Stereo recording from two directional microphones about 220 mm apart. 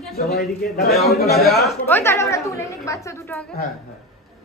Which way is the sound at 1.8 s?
10° left (ahead or behind).